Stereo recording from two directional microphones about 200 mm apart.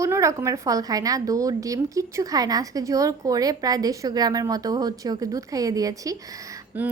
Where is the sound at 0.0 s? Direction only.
15° right (ahead or behind).